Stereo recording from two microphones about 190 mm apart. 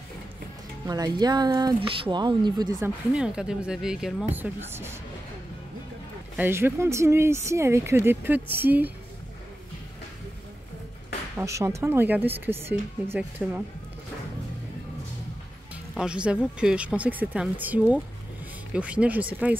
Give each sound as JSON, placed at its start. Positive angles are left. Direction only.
{"t": 0.8, "sound": "speech", "side_deg": -20}
{"t": 2.8, "sound": "speech", "side_deg": -5}
{"t": 6.3, "sound": "speech", "side_deg": -10}
{"t": 11.3, "sound": "speech", "side_deg": -15}
{"t": 15.7, "sound": "speech", "side_deg": -5}